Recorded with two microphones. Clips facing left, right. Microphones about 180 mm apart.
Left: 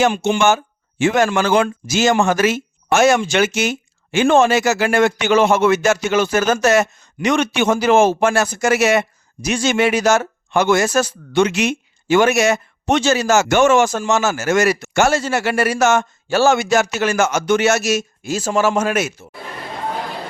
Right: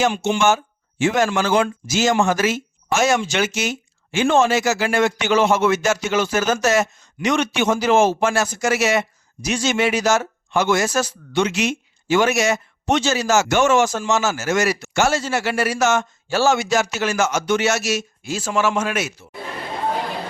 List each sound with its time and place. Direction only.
0.0 s speech: 60° left (ahead or behind)